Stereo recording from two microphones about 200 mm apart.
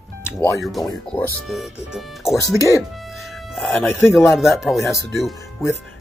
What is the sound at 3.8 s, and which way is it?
Speech, 10° left (ahead or behind).